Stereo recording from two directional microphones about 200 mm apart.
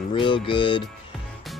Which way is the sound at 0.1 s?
25° left (ahead or behind).